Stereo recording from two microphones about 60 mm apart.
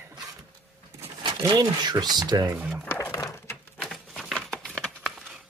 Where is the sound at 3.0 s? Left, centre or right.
Left.